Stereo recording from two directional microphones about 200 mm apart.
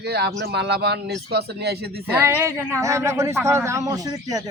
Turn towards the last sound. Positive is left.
turn(degrees=-20)  # may be behind; listen again after turning